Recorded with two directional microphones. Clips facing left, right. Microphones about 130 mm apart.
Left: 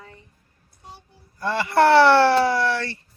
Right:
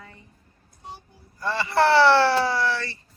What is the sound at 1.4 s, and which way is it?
Speech, 60° left (ahead or behind).